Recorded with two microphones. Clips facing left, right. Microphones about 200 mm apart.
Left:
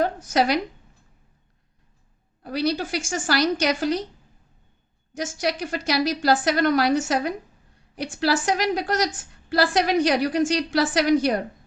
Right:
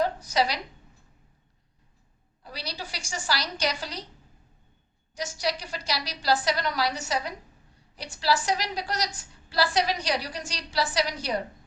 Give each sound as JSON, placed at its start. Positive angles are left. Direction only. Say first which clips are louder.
{"t": 0.0, "sound": "a woman's voice", "louder": "left 4 dB", "side_deg": 50}
{"t": 2.4, "sound": "a woman's voice", "louder": "left 14 dB", "side_deg": 55}
{"t": 5.1, "sound": "a woman's voice", "louder": "left 4 dB", "side_deg": 50}